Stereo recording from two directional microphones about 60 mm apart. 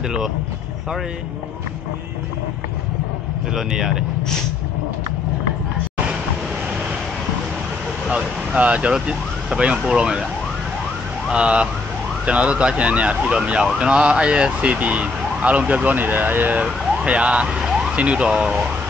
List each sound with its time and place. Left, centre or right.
3.5 s speech: centre
8.5 s speech: right
11.2 s speech: centre